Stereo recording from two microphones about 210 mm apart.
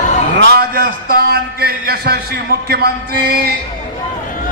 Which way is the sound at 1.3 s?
45° right (ahead or behind).